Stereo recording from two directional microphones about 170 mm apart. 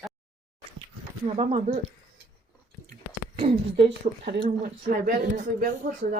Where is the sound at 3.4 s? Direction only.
35° right (ahead or behind).